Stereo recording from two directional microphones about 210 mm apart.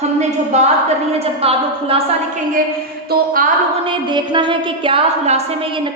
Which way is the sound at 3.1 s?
40° right (ahead or behind).